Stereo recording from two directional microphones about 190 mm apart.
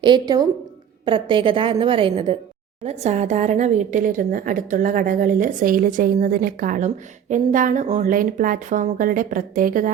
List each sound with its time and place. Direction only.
0.0 s a woman's voice: 20° right (ahead or behind); by 9.9 s 45° right (ahead or behind)